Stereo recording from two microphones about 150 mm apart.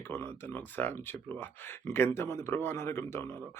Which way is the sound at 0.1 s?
15° left (ahead or behind).